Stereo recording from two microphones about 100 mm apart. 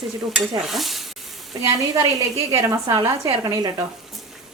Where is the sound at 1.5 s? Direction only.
40° right (ahead or behind).